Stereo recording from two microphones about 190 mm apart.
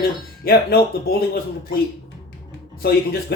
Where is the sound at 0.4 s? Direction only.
50° left (ahead or behind).